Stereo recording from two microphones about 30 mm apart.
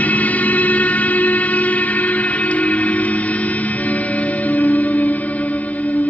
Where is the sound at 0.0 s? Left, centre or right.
Left.